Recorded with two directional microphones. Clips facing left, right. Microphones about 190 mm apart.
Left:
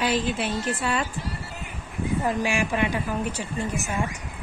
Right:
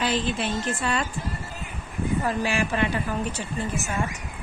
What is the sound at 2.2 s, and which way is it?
A woman's voice, 15° left (ahead or behind).